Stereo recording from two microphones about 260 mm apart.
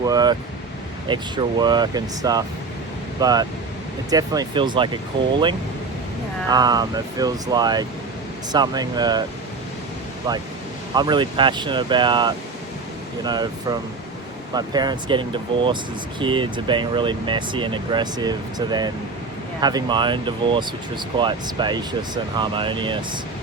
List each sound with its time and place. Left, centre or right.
0.0 s speech: centre
6.5 s speech: centre
10.3 s speech: centre